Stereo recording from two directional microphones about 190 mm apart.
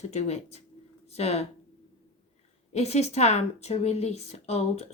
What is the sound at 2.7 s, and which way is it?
Speech, 35° left (ahead or behind).